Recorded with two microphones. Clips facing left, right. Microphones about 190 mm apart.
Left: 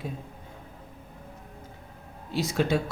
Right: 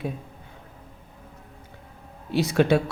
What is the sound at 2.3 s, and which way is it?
Speech, 65° right (ahead or behind).